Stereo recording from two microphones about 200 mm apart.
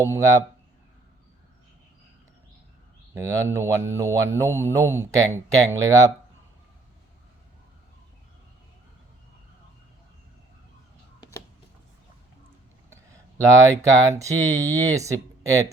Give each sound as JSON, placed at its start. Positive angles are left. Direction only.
{"t": 0.0, "sound": "speech", "side_deg": -15}
{"t": 3.2, "sound": "speech", "side_deg": -15}
{"t": 13.4, "sound": "speech", "side_deg": -15}